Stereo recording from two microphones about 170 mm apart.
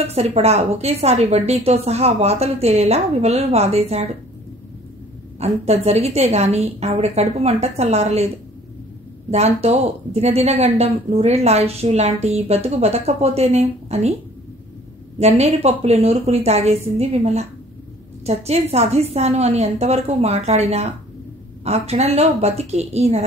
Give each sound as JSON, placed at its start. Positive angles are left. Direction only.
{"t": 0.0, "sound": "speech", "side_deg": -35}
{"t": 5.4, "sound": "speech", "side_deg": -40}
{"t": 9.3, "sound": "speech", "side_deg": -40}
{"t": 15.1, "sound": "speech", "side_deg": -40}